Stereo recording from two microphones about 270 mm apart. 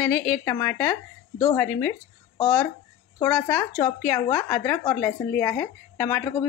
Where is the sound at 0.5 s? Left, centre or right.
Centre.